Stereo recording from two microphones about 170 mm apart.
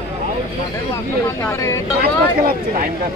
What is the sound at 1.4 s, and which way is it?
Speech, 15° left (ahead or behind).